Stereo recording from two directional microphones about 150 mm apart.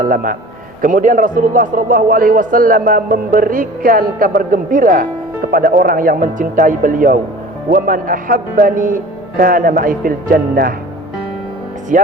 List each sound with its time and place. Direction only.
0.0 s a man's voice: 65° right (ahead or behind)
11.9 s speech: 60° right (ahead or behind)